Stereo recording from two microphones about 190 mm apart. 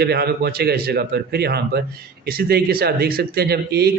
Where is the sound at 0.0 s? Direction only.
55° right (ahead or behind).